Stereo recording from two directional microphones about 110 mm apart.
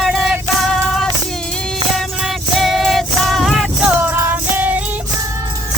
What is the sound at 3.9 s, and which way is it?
Music, 20° right (ahead or behind).